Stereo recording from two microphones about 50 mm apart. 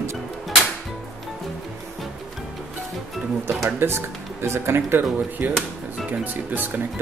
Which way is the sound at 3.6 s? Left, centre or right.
Right.